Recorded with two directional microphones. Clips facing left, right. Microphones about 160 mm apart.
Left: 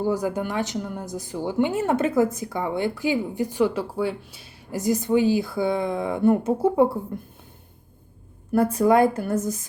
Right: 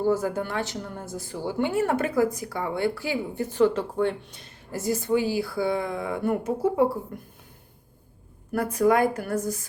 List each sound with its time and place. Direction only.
0.0 s speech: 15° left (ahead or behind)
8.5 s speech: 25° left (ahead or behind)